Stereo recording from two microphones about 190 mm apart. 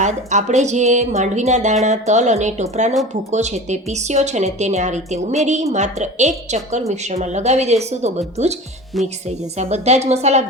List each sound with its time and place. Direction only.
0.0 s speech: 40° right (ahead or behind)
8.9 s speech: centre (ahead or behind)
9.6 s speech: 35° right (ahead or behind)